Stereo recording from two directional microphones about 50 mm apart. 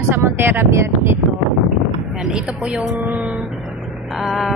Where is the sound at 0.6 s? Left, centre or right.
Right.